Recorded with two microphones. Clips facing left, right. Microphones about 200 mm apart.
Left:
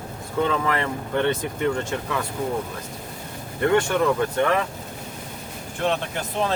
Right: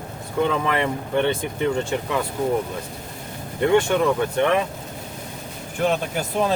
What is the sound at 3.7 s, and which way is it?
Speech, 20° right (ahead or behind).